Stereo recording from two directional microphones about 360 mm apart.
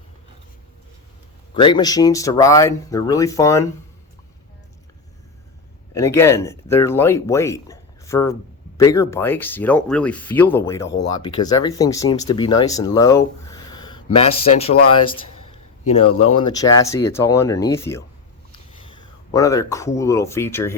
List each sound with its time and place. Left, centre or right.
1.5 s speech: centre
5.9 s speech: centre
15.4 s a sound: left
16.6 s speech: centre